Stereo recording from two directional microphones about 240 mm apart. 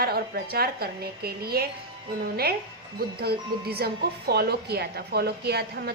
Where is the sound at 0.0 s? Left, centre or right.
Right.